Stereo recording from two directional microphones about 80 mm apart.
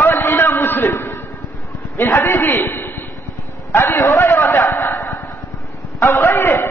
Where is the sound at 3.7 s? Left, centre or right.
Left.